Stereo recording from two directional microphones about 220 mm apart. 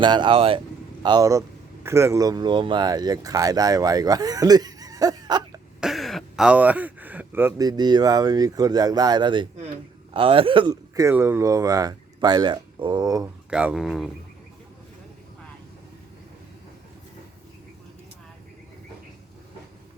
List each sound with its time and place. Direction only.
0.0 s speech: 20° right (ahead or behind)
5.8 s speech: centre (ahead or behind); by 13.2 s 15° right (ahead or behind)
13.5 s speech: 5° right (ahead or behind)